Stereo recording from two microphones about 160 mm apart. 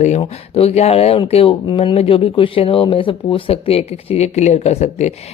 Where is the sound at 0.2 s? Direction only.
40° left (ahead or behind).